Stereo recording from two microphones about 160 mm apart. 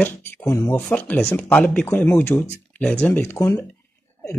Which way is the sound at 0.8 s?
10° left (ahead or behind).